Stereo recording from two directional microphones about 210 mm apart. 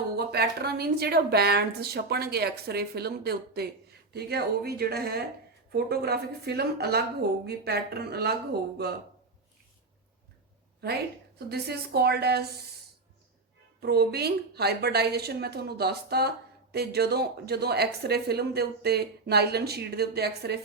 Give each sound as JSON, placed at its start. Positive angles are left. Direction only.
{"t": 0.3, "sound": "a woman's voice", "side_deg": -50}
{"t": 11.4, "sound": "a woman's voice", "side_deg": -50}
{"t": 13.8, "sound": "a woman's voice", "side_deg": -50}